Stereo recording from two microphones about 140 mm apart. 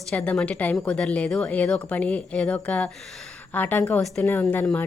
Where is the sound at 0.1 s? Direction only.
5° left (ahead or behind).